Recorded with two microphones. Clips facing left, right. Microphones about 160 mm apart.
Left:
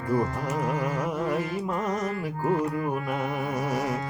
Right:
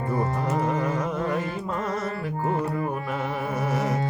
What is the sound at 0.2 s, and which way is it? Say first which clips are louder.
Music: right 2 dB; 35° right (ahead or behind).